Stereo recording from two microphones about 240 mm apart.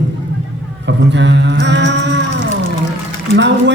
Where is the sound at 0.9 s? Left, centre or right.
Right.